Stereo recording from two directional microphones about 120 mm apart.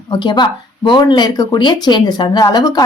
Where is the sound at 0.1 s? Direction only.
40° left (ahead or behind).